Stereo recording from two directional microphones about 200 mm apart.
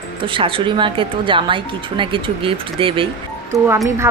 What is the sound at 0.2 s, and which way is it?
Speech, 25° right (ahead or behind).